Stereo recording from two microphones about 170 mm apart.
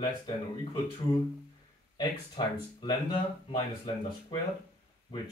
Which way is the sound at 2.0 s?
25° left (ahead or behind).